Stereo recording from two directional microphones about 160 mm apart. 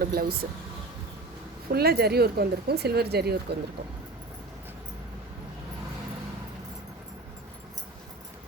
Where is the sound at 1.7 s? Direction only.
80° right.